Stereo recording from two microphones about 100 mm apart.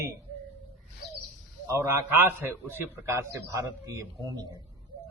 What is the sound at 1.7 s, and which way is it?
A man's voice, 25° right (ahead or behind).